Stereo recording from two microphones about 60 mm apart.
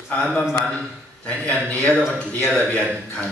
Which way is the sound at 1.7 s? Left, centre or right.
Centre.